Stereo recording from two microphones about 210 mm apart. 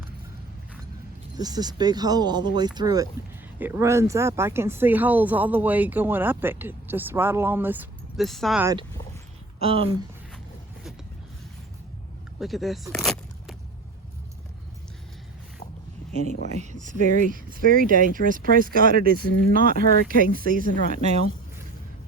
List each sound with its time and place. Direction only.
1.4 s speech: 20° right (ahead or behind); by 8.6 s centre (ahead or behind)
9.6 s speech: 25° right (ahead or behind)
12.4 s a sound: centre (ahead or behind)
16.2 s speech: 35° right (ahead or behind)